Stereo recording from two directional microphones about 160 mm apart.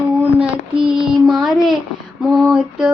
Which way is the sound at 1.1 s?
Centre (ahead or behind).